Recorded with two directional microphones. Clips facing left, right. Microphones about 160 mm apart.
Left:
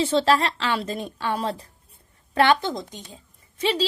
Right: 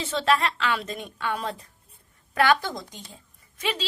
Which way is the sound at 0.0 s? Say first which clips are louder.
Left 4 dB; 30° left (ahead or behind).